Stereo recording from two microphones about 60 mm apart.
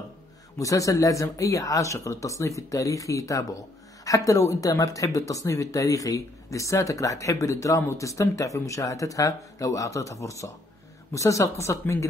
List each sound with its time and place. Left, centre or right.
0.6 s speech: left
5.0 s speech: left